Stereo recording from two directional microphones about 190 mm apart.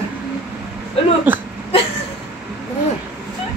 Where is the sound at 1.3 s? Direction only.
10° right (ahead or behind).